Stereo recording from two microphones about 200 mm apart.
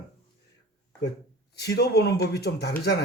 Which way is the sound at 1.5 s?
55° left (ahead or behind).